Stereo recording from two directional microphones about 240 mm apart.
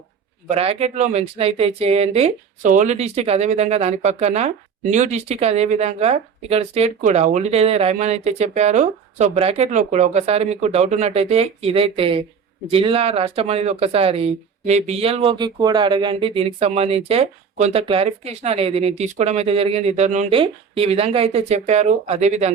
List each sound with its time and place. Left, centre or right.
0.4 s speech: right